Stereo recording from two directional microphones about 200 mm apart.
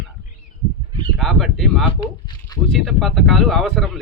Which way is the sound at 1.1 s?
Centre (ahead or behind).